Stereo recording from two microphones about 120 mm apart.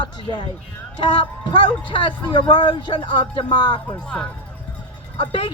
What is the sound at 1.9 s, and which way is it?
Speech, 40° left (ahead or behind).